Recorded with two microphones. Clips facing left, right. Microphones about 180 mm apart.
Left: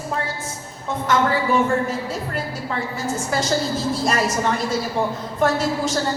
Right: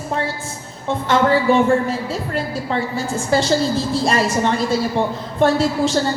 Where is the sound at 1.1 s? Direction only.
30° right (ahead or behind).